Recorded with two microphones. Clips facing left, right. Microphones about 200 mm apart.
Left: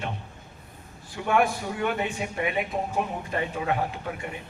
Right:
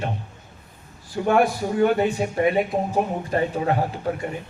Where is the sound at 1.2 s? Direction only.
40° right (ahead or behind).